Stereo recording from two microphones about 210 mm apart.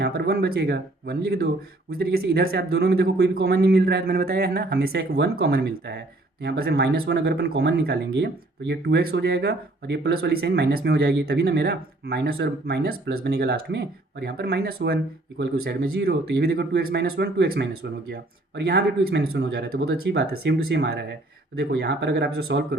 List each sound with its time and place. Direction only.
0.0 s speech: 50° right (ahead or behind)